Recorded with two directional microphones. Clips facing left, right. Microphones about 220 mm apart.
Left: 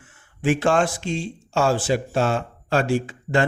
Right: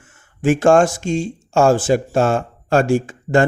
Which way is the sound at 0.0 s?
45° right (ahead or behind).